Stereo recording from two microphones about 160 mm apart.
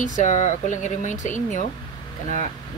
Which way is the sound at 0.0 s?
50° left (ahead or behind).